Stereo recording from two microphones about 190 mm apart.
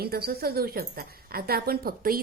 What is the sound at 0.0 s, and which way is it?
A woman's voice, 55° right (ahead or behind).